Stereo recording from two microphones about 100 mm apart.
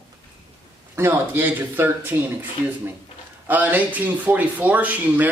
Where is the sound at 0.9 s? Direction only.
20° right (ahead or behind).